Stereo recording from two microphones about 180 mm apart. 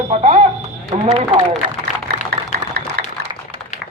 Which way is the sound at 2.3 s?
65° right (ahead or behind).